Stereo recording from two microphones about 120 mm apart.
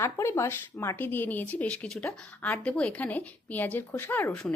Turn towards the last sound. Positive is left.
turn(degrees=5)  # may be behind; listen again after turning